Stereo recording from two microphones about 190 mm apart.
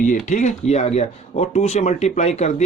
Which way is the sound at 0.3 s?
40° left (ahead or behind).